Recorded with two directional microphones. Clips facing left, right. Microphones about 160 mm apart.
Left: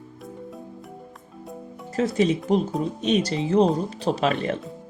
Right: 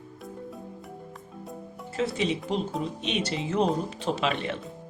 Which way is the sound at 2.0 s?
45° left (ahead or behind).